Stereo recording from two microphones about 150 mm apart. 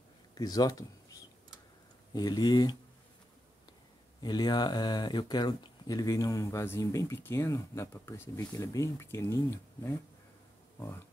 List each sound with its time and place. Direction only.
0.3 s a sound: 25° left (ahead or behind)
2.1 s speech: 30° left (ahead or behind)
4.2 s speech: 30° left (ahead or behind)